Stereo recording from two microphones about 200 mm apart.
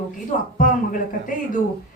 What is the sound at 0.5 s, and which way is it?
Speech, 40° left (ahead or behind).